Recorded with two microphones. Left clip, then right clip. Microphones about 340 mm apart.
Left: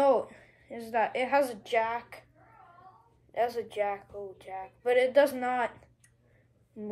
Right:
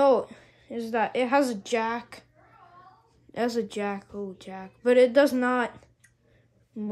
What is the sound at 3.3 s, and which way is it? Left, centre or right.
A woman's voice, right.